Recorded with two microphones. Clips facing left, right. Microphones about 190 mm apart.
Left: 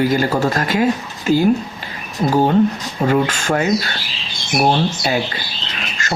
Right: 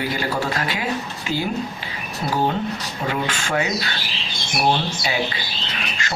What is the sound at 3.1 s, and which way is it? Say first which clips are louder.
Speech: left 7 dB; 45° left (ahead or behind).